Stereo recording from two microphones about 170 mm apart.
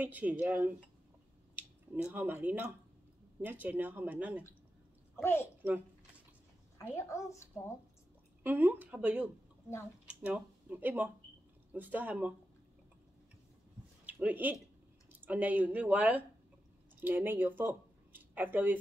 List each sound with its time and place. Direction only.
0.0 s speech: 10° right (ahead or behind)
2.0 s speech: 10° right (ahead or behind)
5.1 s a child's voice: 15° left (ahead or behind)
7.0 s a woman's voice: 15° left (ahead or behind)
8.5 s speech: 10° right (ahead or behind)
14.0 s speech: 10° right (ahead or behind)